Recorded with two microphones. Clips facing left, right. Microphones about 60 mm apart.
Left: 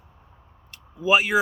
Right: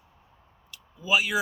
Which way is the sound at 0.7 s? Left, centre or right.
Left.